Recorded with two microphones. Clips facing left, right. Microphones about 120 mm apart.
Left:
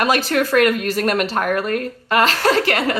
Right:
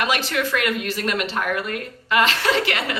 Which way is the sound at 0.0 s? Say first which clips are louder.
Left 5 dB; 40° left (ahead or behind).